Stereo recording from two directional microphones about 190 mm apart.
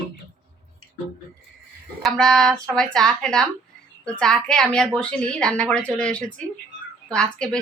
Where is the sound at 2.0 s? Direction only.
5° left (ahead or behind).